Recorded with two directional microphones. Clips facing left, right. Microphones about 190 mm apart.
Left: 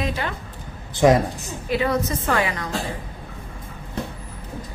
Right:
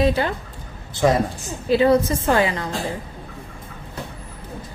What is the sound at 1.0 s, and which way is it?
Speech, 15° left (ahead or behind).